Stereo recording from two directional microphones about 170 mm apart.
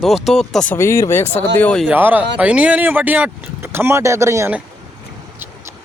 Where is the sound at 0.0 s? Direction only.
Centre (ahead or behind).